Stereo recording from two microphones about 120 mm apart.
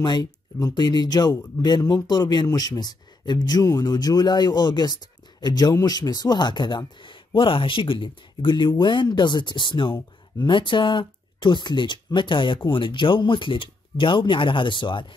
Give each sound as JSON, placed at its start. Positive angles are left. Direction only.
{"t": 0.0, "sound": "speech", "side_deg": 35}